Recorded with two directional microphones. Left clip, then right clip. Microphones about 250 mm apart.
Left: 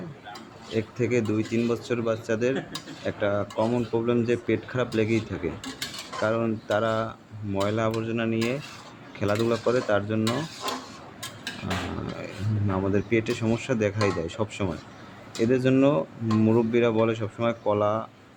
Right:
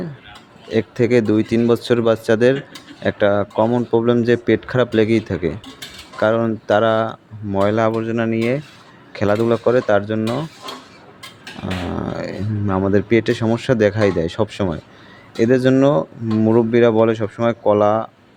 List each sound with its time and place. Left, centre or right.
0.7 s speech: right
12.1 s speech: right